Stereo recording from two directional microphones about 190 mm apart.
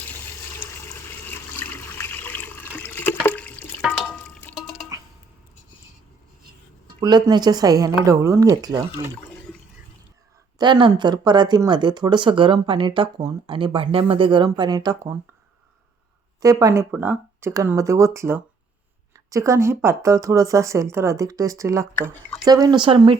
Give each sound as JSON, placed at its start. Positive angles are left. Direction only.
{"t": 0.6, "sound": "water", "side_deg": 10}
{"t": 7.0, "sound": "speech", "side_deg": -20}
{"t": 10.6, "sound": "speech", "side_deg": -25}
{"t": 16.4, "sound": "speech", "side_deg": -20}